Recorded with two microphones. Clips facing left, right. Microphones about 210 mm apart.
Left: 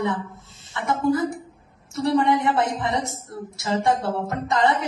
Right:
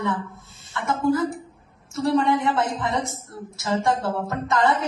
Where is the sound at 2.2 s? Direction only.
15° left (ahead or behind).